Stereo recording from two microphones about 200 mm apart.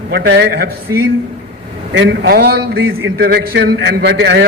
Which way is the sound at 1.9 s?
65° right (ahead or behind).